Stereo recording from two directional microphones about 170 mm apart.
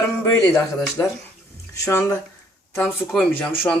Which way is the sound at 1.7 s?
15° left (ahead or behind).